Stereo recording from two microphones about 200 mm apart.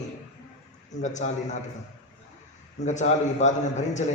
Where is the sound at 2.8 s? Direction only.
35° left (ahead or behind).